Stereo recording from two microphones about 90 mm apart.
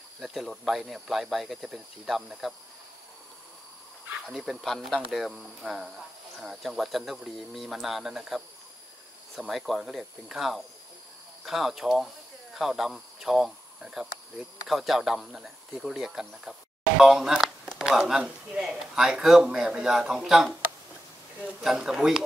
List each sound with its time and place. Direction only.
0.2 s speech: centre (ahead or behind)
4.3 s speech: centre (ahead or behind)
21.6 s speech: 5° right (ahead or behind)